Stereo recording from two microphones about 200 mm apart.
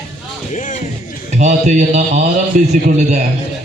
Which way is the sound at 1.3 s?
35° right (ahead or behind).